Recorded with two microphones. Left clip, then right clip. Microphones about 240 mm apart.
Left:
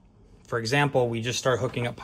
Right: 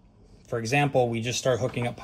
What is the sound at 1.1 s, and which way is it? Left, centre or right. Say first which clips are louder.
Speech: even; centre.